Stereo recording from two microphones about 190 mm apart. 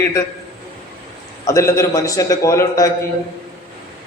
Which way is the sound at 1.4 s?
15° left (ahead or behind).